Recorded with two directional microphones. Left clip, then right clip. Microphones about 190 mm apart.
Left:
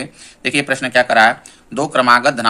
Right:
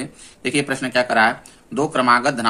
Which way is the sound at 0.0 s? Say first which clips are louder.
Left 4 dB; 15° left (ahead or behind).